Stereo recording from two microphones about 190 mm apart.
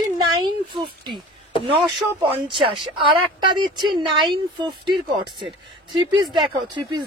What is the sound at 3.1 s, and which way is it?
Speech, 25° right (ahead or behind).